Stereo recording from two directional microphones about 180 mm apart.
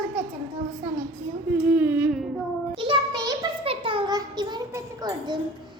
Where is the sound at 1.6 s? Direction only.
10° right (ahead or behind).